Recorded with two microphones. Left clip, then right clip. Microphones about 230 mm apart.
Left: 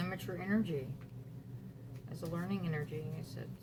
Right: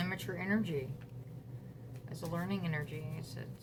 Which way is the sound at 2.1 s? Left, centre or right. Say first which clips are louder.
Right 2 dB; right.